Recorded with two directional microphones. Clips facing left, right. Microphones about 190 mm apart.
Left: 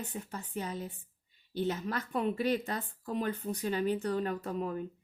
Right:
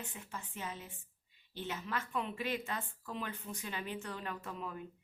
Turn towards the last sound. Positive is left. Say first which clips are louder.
# left 9 dB
turn(degrees=40)  # may be behind; listen again after turning